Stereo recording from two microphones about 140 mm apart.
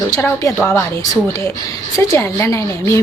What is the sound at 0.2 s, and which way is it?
Speech, 15° left (ahead or behind).